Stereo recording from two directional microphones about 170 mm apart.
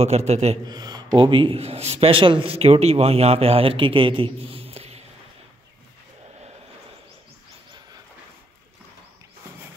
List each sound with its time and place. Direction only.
0.0 s a man's voice: 40° right (ahead or behind)
0.7 s a man's voice: 25° right (ahead or behind)